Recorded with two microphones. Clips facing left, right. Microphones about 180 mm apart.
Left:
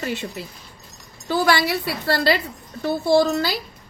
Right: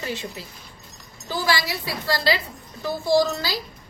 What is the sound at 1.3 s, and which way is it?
Speech, 60° left (ahead or behind).